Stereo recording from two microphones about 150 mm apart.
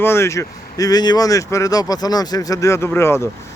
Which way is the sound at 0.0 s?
15° left (ahead or behind).